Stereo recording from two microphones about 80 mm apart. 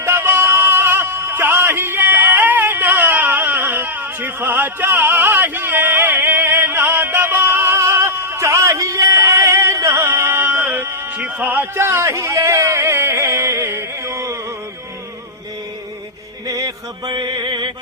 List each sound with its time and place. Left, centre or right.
0.0 s music: right
11.2 s a sound: centre; by 14.3 s right
16.5 s music: right
17.3 s music: right